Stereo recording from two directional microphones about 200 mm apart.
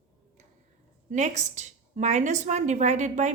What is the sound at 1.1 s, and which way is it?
A woman's voice, 35° right (ahead or behind).